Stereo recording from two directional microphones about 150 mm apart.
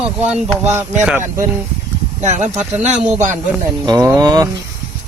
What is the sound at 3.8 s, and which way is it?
Speech, 20° right (ahead or behind).